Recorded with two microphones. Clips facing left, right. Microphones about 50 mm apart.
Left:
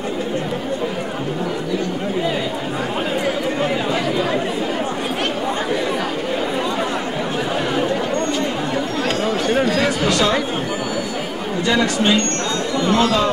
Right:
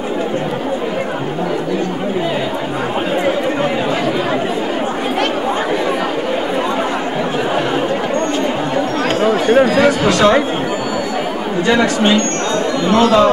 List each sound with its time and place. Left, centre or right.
9.2 s chatter: right
9.8 s speech: right
11.6 s speech: right